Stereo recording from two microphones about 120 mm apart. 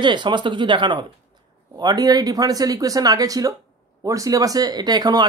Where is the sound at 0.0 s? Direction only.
40° right (ahead or behind).